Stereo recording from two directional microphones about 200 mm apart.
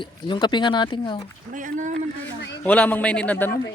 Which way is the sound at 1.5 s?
40° right (ahead or behind).